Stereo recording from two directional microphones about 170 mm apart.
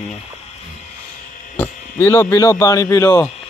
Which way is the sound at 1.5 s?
15° left (ahead or behind).